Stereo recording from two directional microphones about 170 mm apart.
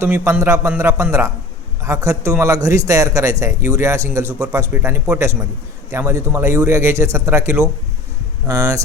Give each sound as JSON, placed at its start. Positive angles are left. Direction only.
{"t": 0.0, "sound": "a man's voice", "side_deg": -15}